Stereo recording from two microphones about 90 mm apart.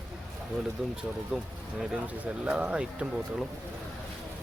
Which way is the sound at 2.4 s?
15° right (ahead or behind).